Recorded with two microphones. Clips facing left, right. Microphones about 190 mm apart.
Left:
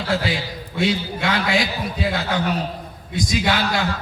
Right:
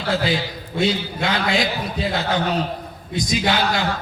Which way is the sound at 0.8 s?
20° right (ahead or behind).